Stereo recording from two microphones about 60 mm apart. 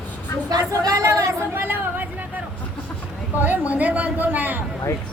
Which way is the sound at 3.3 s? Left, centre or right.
Right.